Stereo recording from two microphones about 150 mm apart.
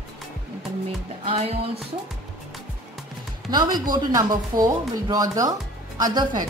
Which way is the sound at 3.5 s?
30° right (ahead or behind).